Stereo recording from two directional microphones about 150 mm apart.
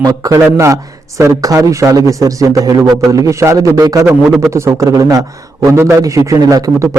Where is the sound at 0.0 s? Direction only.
25° right (ahead or behind).